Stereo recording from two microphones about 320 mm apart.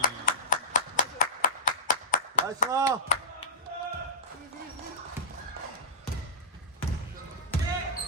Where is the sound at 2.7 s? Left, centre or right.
Centre.